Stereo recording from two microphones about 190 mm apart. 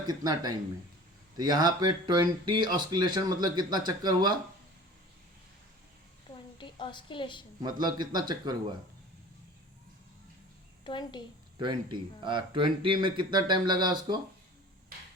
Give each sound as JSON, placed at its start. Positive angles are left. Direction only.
{"t": 0.1, "sound": "speech", "side_deg": -20}
{"t": 6.6, "sound": "a woman's voice", "side_deg": 25}
{"t": 7.6, "sound": "speech", "side_deg": -20}
{"t": 10.8, "sound": "a woman's voice", "side_deg": 25}
{"t": 11.6, "sound": "speech", "side_deg": -25}
{"t": 14.9, "sound": "hammer", "side_deg": -50}